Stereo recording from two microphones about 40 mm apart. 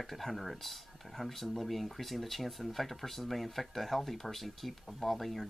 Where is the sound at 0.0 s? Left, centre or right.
Centre.